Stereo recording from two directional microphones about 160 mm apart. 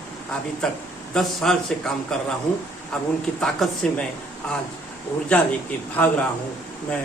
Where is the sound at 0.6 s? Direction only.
5° left (ahead or behind).